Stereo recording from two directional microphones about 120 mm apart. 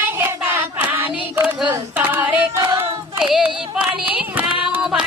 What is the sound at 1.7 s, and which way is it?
Singing, 20° right (ahead or behind).